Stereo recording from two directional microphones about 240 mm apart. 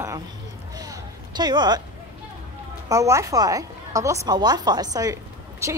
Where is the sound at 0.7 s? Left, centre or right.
Centre.